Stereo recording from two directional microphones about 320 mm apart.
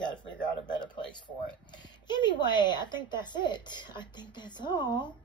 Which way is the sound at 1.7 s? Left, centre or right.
Centre.